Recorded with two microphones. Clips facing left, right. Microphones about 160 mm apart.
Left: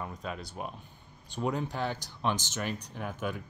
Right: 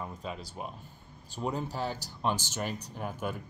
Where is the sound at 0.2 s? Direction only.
30° right (ahead or behind).